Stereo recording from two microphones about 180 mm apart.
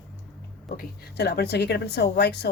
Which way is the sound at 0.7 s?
65° left (ahead or behind).